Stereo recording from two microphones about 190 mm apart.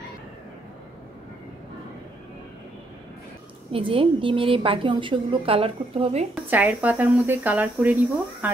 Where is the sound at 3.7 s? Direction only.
30° right (ahead or behind).